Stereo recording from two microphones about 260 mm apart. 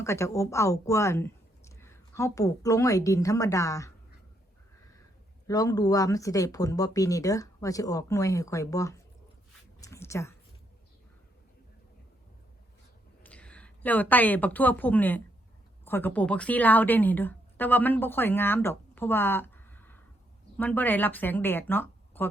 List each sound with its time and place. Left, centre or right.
0.0 s speech: centre
5.5 s speech: centre
9.8 s a sound: centre
13.2 s a woman's voice: centre